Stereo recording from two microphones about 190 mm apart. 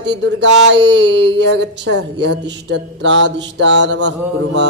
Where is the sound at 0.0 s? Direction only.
70° right (ahead or behind).